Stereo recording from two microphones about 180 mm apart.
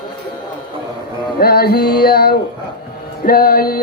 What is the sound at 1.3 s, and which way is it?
Music, 55° left (ahead or behind).